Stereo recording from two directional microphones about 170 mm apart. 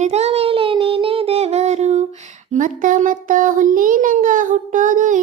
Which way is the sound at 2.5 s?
50° right (ahead or behind).